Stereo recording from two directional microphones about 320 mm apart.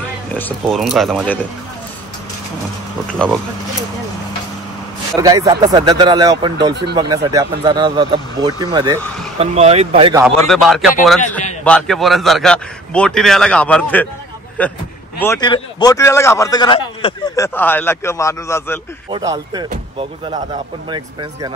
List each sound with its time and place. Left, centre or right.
0.3 s a man's voice: centre
3.1 s a man's voice: centre
5.1 s speech: centre
6.7 s speech: right
7.0 s speech: centre
10.2 s a man's voice: centre
19.0 s speech: centre